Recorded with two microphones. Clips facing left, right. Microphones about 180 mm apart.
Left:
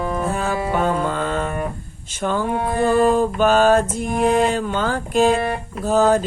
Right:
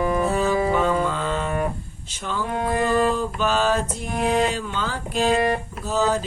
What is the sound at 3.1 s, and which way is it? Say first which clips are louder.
Mantra: left 7 dB; 50° left (ahead or behind).